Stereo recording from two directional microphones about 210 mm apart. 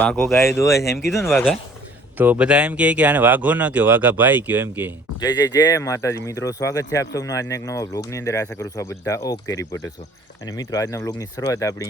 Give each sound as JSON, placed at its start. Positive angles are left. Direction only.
{"t": 0.0, "sound": "speech", "side_deg": 10}
{"t": 2.1, "sound": "speech", "side_deg": -10}
{"t": 5.2, "sound": "speech", "side_deg": 20}